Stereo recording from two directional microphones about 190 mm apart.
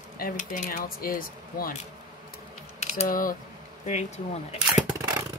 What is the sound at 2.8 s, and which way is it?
Speech, 40° left (ahead or behind).